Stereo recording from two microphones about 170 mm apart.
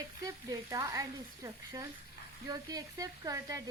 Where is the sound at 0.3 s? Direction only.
20° right (ahead or behind).